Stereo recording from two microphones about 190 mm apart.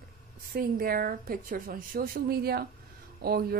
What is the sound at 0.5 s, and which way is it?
A woman's voice, 50° right (ahead or behind).